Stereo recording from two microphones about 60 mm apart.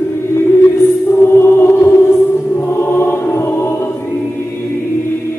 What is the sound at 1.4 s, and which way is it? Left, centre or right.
Music, left.